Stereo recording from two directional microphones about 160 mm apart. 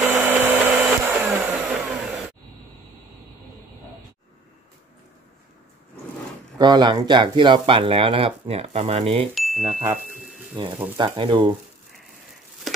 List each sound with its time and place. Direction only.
0.1 s blender: 10° right (ahead or behind)
6.6 s speech: 25° right (ahead or behind)
9.3 s chime: centre (ahead or behind)
10.6 s speech: 30° right (ahead or behind)